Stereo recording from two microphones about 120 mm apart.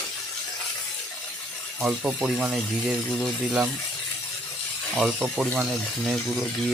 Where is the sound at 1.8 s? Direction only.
10° right (ahead or behind).